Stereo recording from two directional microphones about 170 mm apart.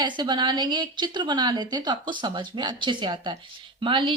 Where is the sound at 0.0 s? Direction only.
25° right (ahead or behind).